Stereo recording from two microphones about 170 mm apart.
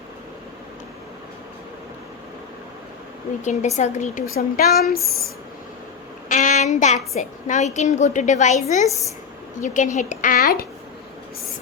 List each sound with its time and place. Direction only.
3.4 s a woman's voice: 40° left (ahead or behind)
4.4 s a woman's voice: 60° left (ahead or behind)
4.9 s speech: centre (ahead or behind)
6.2 s a woman's voice: 45° left (ahead or behind); by 10.7 s 65° left (ahead or behind)